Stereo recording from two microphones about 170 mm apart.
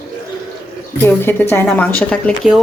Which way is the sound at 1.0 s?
15° left (ahead or behind).